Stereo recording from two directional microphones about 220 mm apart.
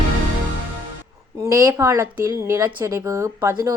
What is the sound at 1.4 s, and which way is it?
Speech, 10° right (ahead or behind).